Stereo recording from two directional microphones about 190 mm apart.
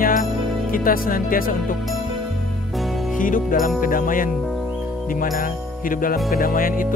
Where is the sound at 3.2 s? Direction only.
45° left (ahead or behind).